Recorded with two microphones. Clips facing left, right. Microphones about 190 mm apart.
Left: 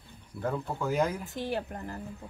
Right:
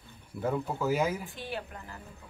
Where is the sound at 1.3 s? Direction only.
45° left (ahead or behind).